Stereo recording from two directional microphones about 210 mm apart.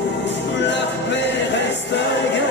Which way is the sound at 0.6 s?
60° left (ahead or behind).